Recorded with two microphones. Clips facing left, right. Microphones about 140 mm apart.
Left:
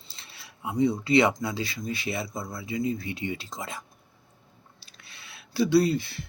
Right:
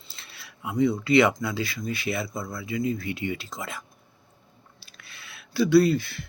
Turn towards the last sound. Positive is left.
turn(degrees=25)  # may be behind; listen again after turning